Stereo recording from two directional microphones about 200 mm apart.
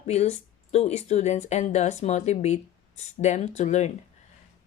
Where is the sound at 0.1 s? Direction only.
35° left (ahead or behind).